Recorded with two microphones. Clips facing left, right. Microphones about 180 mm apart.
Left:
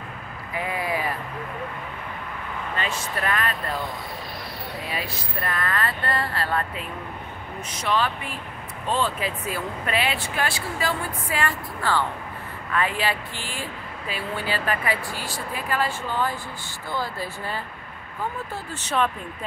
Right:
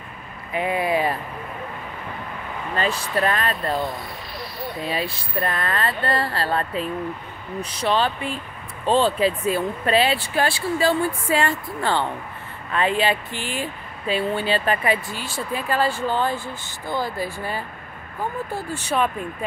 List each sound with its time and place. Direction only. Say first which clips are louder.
0.6 s speech: right 6 dB; 25° right (ahead or behind)
2.7 s speech: right 7 dB; 35° right (ahead or behind)
4.8 s speech: right 6 dB; 30° right (ahead or behind)
16.9 s speech: right 4 dB; 15° right (ahead or behind)